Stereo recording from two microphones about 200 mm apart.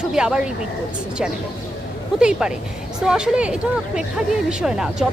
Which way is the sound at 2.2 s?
5° right (ahead or behind).